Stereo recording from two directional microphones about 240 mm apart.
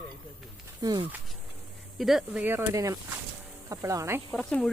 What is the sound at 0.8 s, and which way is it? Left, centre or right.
Speech, centre.